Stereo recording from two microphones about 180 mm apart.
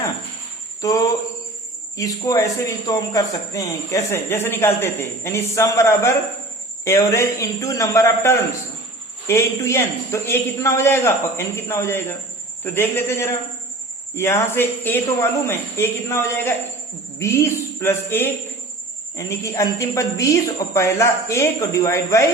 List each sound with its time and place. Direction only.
0.8 s a man's voice: 20° left (ahead or behind)